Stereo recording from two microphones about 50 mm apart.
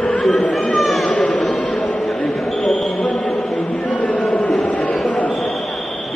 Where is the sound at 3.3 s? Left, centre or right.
Centre.